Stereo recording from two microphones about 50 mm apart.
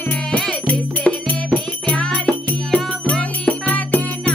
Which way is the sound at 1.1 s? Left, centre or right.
Left.